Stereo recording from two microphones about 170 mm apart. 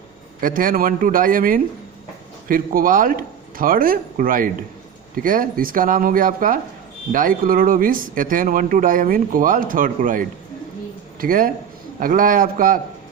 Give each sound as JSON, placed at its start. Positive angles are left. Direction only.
{"t": 0.4, "sound": "speech", "side_deg": -55}